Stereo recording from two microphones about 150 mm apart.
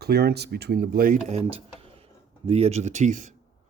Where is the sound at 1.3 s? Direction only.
40° right (ahead or behind).